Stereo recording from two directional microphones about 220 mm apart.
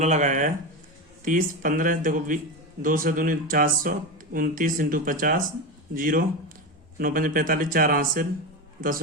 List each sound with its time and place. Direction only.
0.0 s speech: 35° right (ahead or behind)